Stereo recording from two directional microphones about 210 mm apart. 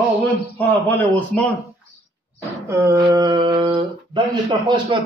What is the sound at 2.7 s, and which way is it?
Speech, 15° right (ahead or behind).